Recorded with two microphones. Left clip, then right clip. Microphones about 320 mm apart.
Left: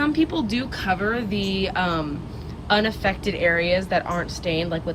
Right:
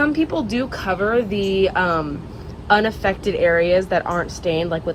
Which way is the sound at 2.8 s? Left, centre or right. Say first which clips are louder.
Right 3 dB; centre.